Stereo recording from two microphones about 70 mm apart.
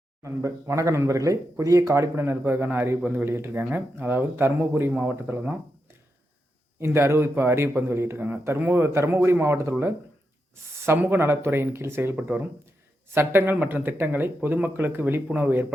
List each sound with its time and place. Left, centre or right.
0.2 s a man's voice: right
6.7 s a man's voice: right
10.9 s a man's voice: right
12.1 s speech: right
13.1 s a man's voice: right